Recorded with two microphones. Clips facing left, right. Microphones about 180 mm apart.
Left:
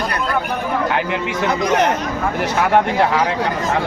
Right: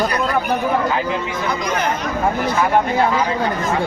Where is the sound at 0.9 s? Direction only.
70° left (ahead or behind).